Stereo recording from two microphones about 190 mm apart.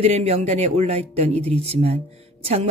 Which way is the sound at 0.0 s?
30° right (ahead or behind).